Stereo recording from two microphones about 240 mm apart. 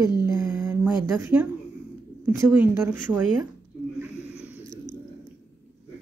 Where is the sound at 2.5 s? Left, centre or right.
Centre.